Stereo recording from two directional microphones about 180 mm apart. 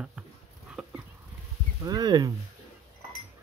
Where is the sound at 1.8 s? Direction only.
20° right (ahead or behind).